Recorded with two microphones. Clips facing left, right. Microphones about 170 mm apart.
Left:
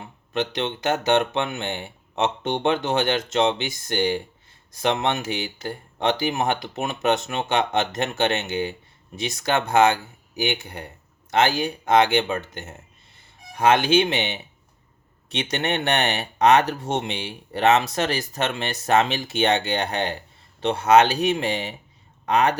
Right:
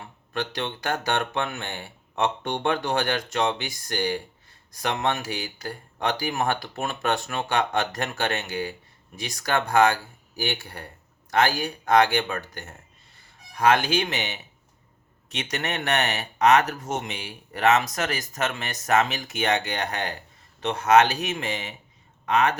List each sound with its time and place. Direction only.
0.0 s speech: 20° left (ahead or behind)